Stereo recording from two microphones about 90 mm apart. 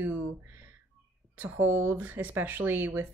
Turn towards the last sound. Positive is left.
turn(degrees=-20)  # may be behind; listen again after turning